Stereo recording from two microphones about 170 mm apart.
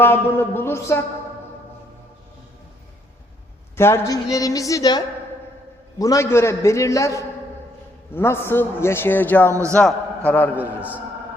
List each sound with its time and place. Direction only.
0.0 s a man's voice: 10° left (ahead or behind)
3.8 s a woman's voice: 15° left (ahead or behind)
9.5 s a man's voice: 15° right (ahead or behind)
9.7 s a man's voice: 5° left (ahead or behind)